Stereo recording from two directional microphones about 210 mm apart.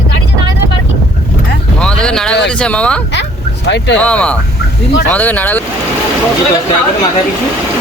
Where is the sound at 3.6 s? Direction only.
55° left (ahead or behind).